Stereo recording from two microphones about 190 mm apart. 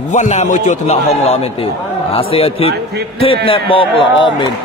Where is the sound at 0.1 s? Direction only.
40° left (ahead or behind).